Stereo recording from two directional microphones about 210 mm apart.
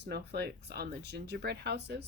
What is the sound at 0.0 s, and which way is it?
Speech, 50° right (ahead or behind).